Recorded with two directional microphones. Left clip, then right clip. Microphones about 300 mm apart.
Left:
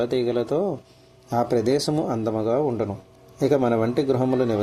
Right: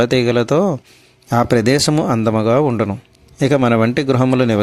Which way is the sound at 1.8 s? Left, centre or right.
Right.